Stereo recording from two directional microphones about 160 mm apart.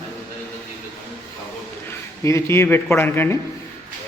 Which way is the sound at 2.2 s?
15° left (ahead or behind).